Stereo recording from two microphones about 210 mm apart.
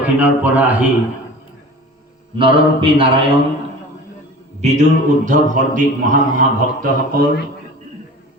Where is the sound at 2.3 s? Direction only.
25° right (ahead or behind).